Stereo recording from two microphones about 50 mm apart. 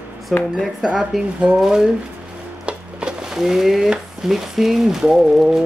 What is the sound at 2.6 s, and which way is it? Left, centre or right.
Wood, centre.